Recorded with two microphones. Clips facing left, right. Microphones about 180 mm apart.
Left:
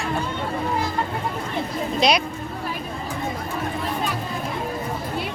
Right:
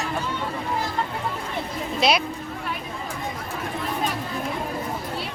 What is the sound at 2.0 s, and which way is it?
Speech, 5° right (ahead or behind).